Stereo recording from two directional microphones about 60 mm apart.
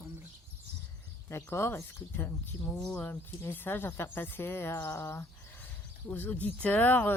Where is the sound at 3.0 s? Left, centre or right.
Left.